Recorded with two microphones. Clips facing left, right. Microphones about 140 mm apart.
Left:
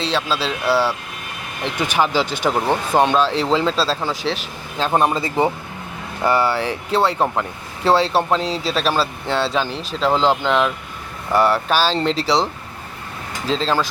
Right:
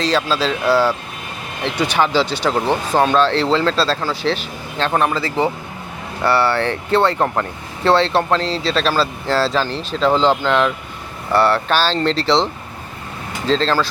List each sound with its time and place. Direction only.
0.0 s speech: 5° left (ahead or behind)
4.9 s speech: 20° left (ahead or behind)
13.5 s speech: 5° left (ahead or behind)